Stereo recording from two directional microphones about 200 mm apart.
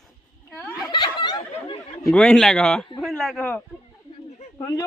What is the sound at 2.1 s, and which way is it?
A man's voice, 5° left (ahead or behind).